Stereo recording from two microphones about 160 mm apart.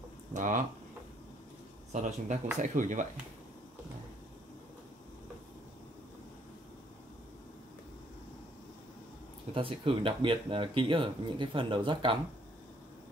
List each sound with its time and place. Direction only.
0.3 s speech: 50° right (ahead or behind)
1.9 s speech: 50° right (ahead or behind)
9.5 s speech: 35° right (ahead or behind)